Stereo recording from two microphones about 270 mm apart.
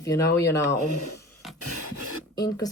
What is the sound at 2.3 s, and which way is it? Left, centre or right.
Speech, centre.